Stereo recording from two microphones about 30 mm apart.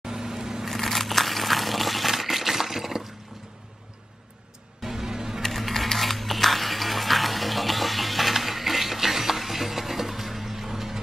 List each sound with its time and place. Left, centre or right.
0.0 s vehicle: centre
0.7 s a sound: centre
4.8 s music: centre
5.4 s music: centre